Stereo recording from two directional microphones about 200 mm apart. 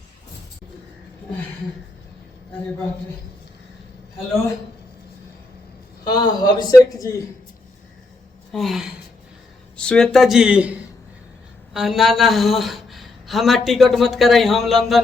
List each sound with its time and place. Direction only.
6.1 s a man's voice: 20° left (ahead or behind)
8.5 s speech: centre (ahead or behind)